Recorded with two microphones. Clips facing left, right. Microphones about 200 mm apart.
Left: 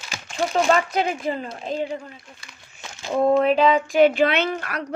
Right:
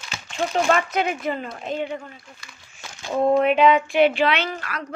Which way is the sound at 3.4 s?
35° left (ahead or behind).